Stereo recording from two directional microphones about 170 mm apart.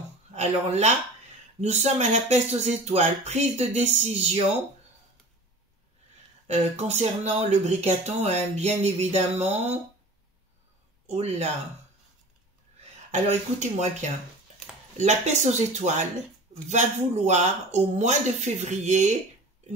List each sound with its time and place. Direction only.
0.3 s speech: 40° right (ahead or behind)
6.4 s speech: 40° right (ahead or behind)
11.1 s speech: 40° right (ahead or behind)
13.1 s speech: 40° right (ahead or behind)
15.0 s speech: 45° right (ahead or behind)